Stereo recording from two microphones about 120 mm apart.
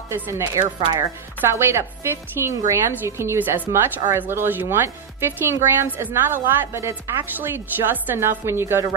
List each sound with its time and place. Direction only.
0.1 s speech: 25° right (ahead or behind)